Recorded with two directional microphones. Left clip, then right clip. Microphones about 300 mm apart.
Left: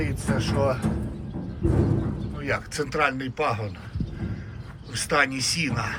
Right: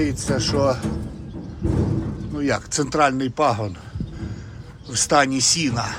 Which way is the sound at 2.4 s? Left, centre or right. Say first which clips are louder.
Right 5 dB; centre.